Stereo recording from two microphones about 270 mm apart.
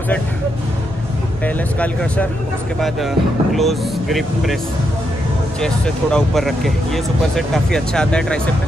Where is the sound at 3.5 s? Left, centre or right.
Centre.